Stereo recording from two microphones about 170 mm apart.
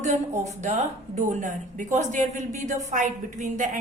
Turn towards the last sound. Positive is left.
turn(degrees=-50)  # may be behind; listen again after turning